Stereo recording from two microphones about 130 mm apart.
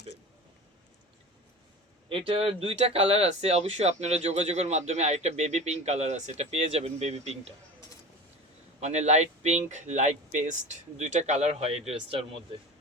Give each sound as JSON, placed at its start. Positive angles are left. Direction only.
{"t": 2.0, "sound": "speech", "side_deg": -45}
{"t": 8.8, "sound": "speech", "side_deg": -60}